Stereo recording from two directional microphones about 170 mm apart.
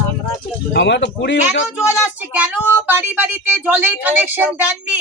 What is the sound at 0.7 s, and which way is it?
Speech, 85° left.